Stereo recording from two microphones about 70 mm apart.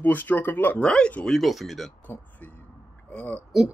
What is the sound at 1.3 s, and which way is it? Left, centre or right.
Speech, centre.